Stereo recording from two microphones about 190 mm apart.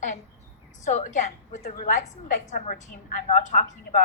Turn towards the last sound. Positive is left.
turn(degrees=40)  # may be behind; listen again after turning